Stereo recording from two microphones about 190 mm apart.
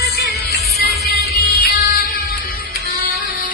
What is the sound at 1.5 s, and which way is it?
Music, 50° left (ahead or behind).